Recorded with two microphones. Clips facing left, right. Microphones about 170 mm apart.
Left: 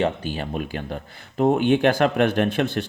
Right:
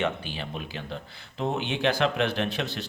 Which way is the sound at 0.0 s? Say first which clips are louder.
Left 6 dB; 45° left (ahead or behind).